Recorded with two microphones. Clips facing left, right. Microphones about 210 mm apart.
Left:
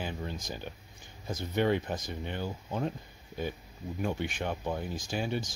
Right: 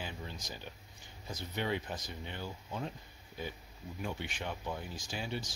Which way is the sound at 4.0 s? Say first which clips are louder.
Left 7 dB; 50° left (ahead or behind).